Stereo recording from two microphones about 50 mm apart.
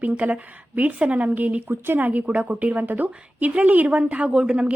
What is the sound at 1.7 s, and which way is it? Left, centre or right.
Speech, right.